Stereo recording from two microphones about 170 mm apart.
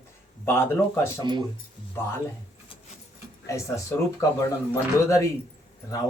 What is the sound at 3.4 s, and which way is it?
Speech, 15° left (ahead or behind).